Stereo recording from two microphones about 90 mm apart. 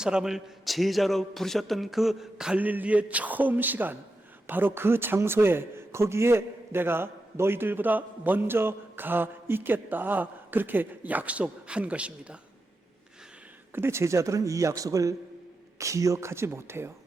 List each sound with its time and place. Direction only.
0.0 s a man's voice: 10° right (ahead or behind)
2.6 s a man's voice: 20° right (ahead or behind)
13.7 s a man's voice: 30° right (ahead or behind)